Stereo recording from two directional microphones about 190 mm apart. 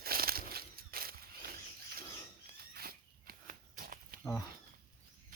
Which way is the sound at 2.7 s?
50° right (ahead or behind).